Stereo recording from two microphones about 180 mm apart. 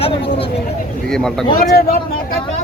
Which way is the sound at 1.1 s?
5° left (ahead or behind).